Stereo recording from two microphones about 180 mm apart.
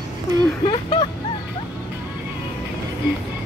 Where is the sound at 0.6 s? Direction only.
25° left (ahead or behind).